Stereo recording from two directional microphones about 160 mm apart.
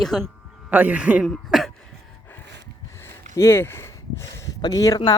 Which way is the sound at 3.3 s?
15° left (ahead or behind).